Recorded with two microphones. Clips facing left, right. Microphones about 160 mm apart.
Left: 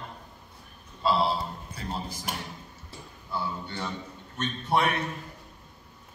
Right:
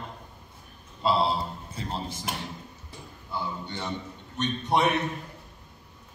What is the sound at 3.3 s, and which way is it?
A man's voice, 20° right (ahead or behind).